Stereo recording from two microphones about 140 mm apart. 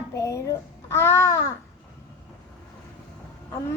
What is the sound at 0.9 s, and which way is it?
Babbling, 20° left (ahead or behind).